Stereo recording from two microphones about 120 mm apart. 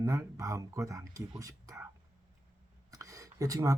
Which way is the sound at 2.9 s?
25° right (ahead or behind).